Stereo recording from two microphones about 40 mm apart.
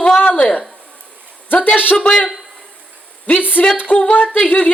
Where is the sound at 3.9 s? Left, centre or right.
Left.